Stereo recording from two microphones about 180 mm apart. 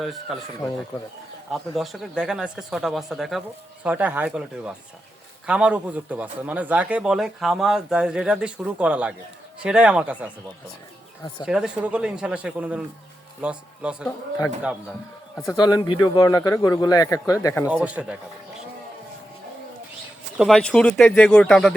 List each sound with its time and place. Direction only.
0.0 s a man's voice: centre (ahead or behind)
1.5 s a man's voice: centre (ahead or behind)
11.4 s a man's voice: 5° right (ahead or behind)
15.4 s a man's voice: 20° left (ahead or behind)
17.7 s speech: 10° right (ahead or behind)
20.3 s a man's voice: centre (ahead or behind)